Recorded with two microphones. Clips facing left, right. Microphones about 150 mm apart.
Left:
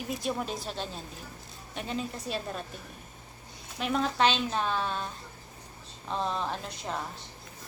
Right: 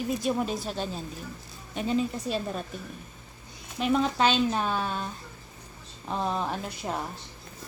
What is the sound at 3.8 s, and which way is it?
A woman's voice, centre (ahead or behind).